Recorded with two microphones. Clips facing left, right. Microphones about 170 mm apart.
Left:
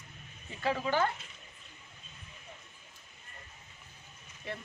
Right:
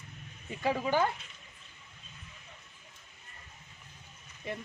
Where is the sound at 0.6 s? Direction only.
15° right (ahead or behind).